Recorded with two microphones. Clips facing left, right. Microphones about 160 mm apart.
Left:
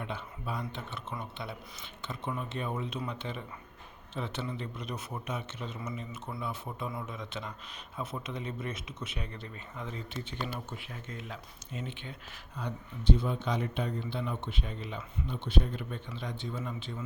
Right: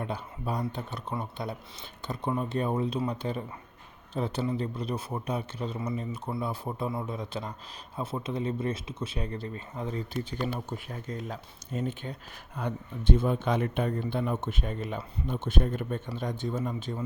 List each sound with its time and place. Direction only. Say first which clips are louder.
0.0 s a man's voice: right 5 dB; 40° right (ahead or behind)
12.5 s speech: right 5 dB; 55° right (ahead or behind)